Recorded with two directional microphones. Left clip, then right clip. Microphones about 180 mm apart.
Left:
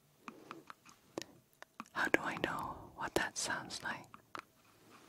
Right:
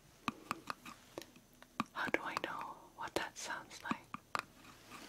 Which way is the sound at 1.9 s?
45° left (ahead or behind).